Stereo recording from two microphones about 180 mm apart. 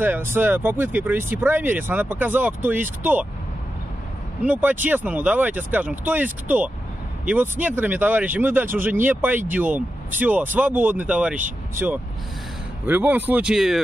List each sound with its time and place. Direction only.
0.0 s speech: 10° right (ahead or behind)
4.5 s speech: 10° right (ahead or behind)